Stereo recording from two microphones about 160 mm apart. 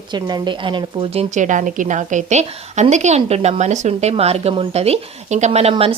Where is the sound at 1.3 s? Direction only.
50° right (ahead or behind).